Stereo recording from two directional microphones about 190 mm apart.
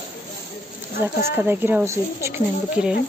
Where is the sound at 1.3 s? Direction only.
10° right (ahead or behind).